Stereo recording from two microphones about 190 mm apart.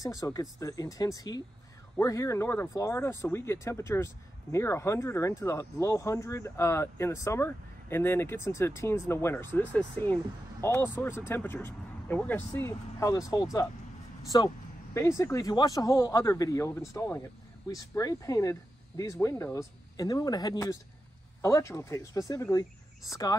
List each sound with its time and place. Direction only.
0.0 s speech: 20° left (ahead or behind)